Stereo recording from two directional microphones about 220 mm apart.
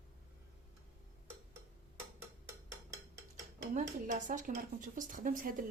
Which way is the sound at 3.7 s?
35° right (ahead or behind).